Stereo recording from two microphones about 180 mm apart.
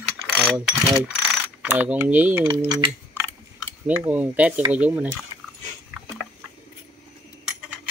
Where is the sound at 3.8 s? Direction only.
10° right (ahead or behind).